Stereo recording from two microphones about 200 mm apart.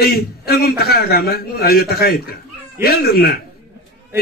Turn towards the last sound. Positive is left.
turn(degrees=50)  # may be behind; listen again after turning